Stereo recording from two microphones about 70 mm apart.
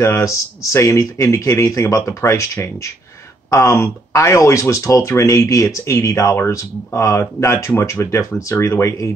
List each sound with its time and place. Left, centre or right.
0.0 s speech: left
3.5 s speech: left